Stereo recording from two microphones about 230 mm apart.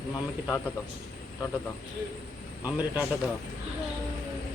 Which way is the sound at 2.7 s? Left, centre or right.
Centre.